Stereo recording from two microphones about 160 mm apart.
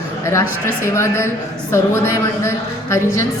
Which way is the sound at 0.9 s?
15° left (ahead or behind).